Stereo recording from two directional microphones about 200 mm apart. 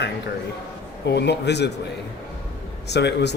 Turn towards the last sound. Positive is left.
turn(degrees=60)  # may be behind; listen again after turning